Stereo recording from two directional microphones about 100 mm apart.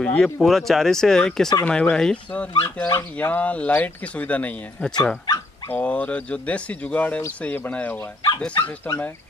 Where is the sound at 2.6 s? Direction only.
25° left (ahead or behind).